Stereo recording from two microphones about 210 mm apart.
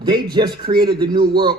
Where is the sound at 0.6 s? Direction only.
45° right (ahead or behind).